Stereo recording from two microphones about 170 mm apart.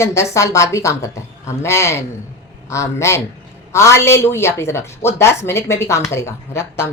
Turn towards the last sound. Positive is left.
turn(degrees=15)  # may be behind; listen again after turning